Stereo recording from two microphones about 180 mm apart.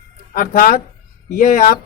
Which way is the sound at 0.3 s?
50° left (ahead or behind).